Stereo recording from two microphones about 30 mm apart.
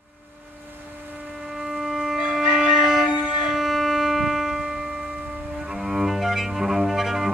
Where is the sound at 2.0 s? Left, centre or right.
Centre.